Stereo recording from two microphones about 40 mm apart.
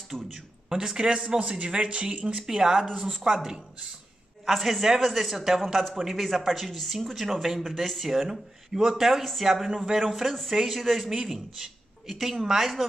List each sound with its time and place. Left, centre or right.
0.1 s a sound: centre
0.9 s speech: right
2.3 s speech: centre
2.9 s speech: centre
3.3 s speech: centre